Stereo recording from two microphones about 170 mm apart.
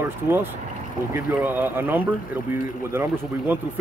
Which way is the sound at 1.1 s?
10° right (ahead or behind).